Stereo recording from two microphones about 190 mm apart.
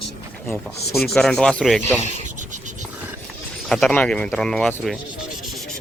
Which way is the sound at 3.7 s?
5° left (ahead or behind).